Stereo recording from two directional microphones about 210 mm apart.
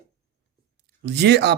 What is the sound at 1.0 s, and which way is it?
Speech, 55° right (ahead or behind).